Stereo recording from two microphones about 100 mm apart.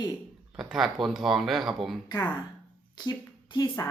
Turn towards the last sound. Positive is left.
turn(degrees=30)  # may be behind; listen again after turning